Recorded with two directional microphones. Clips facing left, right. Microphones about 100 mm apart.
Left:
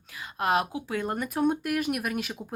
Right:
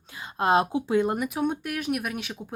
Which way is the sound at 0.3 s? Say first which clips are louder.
Right 4 dB; 25° right (ahead or behind).